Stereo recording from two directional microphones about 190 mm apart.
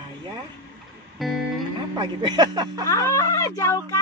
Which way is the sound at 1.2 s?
Centre (ahead or behind).